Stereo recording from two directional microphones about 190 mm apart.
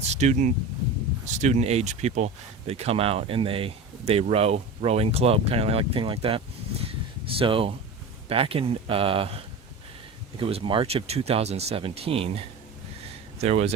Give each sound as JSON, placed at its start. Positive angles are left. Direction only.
{"t": 0.1, "sound": "speech", "side_deg": -35}